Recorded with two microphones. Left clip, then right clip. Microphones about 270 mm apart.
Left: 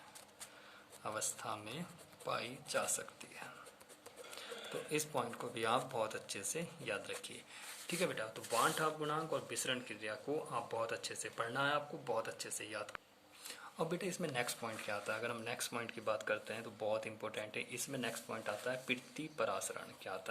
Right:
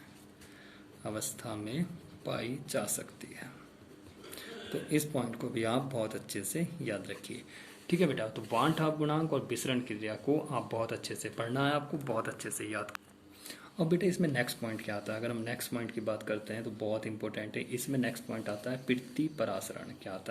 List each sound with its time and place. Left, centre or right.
1.0 s speech: left
4.9 s speech: left
7.9 s speech: centre